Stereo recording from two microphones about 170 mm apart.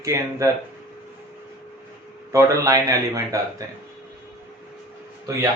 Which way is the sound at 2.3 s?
20° right (ahead or behind).